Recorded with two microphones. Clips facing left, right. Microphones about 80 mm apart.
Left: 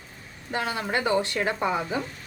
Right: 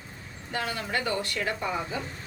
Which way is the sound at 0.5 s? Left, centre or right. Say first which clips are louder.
Left 3 dB; left.